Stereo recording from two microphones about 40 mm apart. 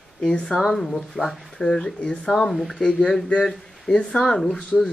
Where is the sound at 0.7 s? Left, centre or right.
Centre.